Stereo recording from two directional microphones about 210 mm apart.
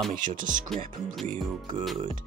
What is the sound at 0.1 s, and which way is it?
Speech, 40° right (ahead or behind).